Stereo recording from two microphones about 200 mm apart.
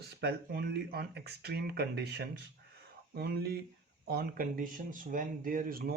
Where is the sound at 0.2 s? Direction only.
55° right (ahead or behind).